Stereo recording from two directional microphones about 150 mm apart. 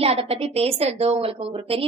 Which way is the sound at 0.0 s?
40° right (ahead or behind).